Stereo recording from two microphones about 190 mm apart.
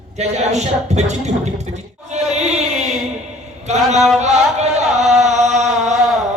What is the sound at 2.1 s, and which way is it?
Chant, 35° right (ahead or behind).